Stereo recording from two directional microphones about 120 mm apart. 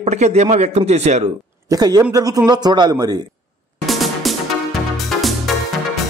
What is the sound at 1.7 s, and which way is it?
Speech, 35° right (ahead or behind).